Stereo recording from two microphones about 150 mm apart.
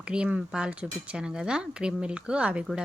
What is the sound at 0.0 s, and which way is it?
Speech, 5° right (ahead or behind).